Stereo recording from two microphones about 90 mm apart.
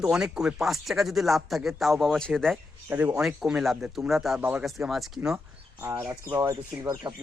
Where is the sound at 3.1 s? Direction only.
10° right (ahead or behind).